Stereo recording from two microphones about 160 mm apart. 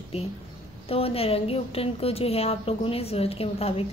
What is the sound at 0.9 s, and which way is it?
A woman's voice, 35° left (ahead or behind).